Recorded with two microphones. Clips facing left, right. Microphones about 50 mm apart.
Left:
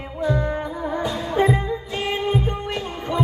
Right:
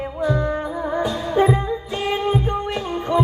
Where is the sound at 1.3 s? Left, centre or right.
Centre.